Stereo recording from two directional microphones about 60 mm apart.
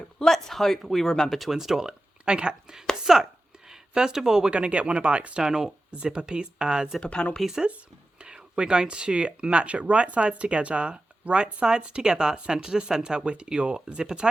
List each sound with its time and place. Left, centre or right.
0.2 s speech: centre
7.0 s speech: centre
7.4 s speech: centre